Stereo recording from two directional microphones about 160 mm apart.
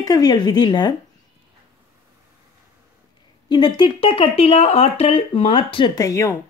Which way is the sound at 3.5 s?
30° left (ahead or behind).